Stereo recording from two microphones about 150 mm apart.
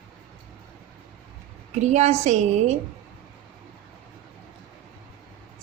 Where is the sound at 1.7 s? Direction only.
50° right (ahead or behind).